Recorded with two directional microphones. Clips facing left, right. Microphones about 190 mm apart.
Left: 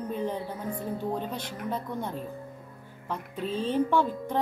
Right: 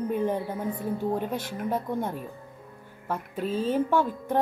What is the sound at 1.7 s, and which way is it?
Speech, 10° right (ahead or behind).